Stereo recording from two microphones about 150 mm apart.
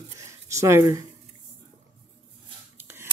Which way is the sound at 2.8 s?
15° right (ahead or behind).